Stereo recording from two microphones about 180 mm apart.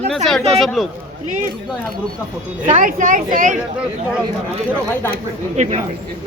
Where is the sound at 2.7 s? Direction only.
45° right (ahead or behind).